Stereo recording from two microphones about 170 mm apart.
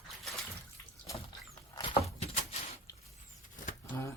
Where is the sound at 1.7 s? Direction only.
30° left (ahead or behind).